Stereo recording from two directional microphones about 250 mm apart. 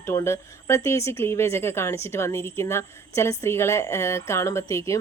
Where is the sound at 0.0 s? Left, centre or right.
Centre.